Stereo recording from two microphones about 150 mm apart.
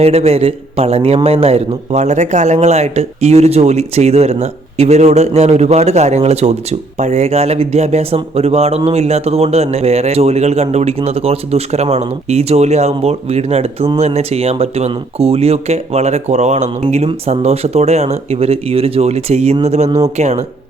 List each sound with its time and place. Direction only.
0.0 s a man's voice: 45° right (ahead or behind)